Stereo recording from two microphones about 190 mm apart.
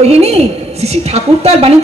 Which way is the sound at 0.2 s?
35° right (ahead or behind).